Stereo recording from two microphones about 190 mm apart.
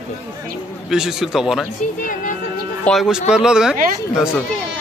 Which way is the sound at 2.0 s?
45° left (ahead or behind).